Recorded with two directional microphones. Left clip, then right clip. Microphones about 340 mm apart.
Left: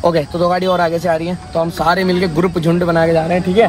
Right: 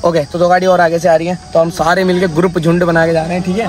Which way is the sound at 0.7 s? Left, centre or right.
Right.